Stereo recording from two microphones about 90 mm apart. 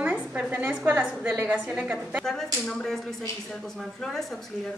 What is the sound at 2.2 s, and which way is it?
Speech, 5° left (ahead or behind).